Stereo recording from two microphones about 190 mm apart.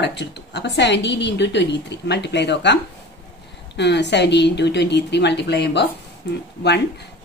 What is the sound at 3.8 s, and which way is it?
A woman's voice, 65° left (ahead or behind).